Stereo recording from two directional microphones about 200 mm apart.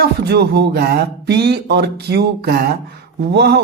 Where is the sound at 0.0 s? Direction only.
55° right (ahead or behind).